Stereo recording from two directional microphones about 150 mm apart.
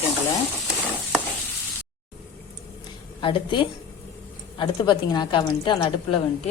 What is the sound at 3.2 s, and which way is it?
A woman's voice, 35° left (ahead or behind).